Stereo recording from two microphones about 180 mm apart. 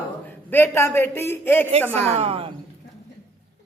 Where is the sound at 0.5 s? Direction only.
10° left (ahead or behind).